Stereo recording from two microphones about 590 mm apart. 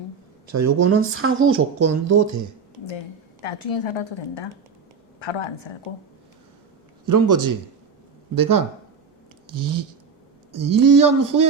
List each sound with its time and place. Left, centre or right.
0.4 s speech: right
3.4 s a woman's voice: left
7.0 s speech: right